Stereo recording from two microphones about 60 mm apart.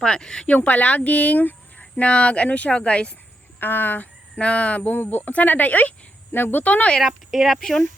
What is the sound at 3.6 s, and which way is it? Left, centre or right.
Speech, left.